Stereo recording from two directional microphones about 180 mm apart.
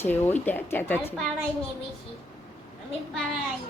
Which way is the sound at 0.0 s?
10° left (ahead or behind).